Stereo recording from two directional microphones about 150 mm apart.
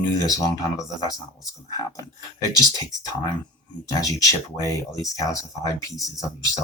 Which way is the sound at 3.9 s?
25° left (ahead or behind).